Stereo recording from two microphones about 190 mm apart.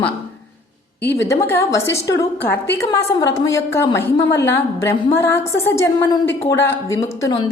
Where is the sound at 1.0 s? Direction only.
10° left (ahead or behind).